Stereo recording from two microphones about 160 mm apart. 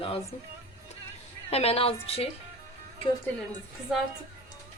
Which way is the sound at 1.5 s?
40° left (ahead or behind).